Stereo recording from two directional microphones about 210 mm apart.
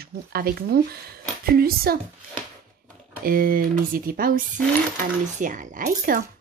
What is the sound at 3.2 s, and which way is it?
Speech, 45° right (ahead or behind).